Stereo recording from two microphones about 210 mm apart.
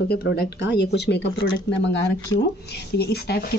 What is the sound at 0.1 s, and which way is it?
Speech, 50° left (ahead or behind).